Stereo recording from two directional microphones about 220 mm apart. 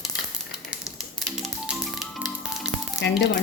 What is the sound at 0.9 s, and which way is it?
Music, centre (ahead or behind).